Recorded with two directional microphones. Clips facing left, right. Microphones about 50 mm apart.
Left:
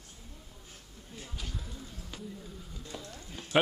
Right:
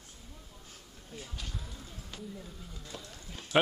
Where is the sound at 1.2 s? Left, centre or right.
Centre.